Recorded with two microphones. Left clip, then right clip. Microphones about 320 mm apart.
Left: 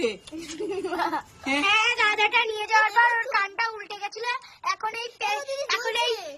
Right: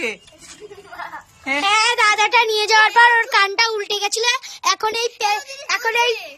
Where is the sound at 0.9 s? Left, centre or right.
Centre.